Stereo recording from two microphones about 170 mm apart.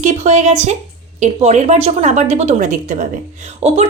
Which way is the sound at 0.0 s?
45° right (ahead or behind).